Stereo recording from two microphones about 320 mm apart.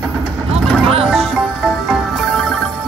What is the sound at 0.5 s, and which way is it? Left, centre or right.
Music, centre.